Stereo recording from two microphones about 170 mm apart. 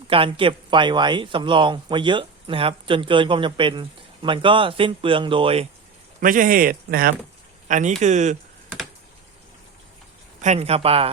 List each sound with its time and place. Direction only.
0.1 s speech: 30° right (ahead or behind)
6.1 s a man's voice: 55° right (ahead or behind)
7.7 s speech: 45° right (ahead or behind)
10.4 s speech: 40° right (ahead or behind)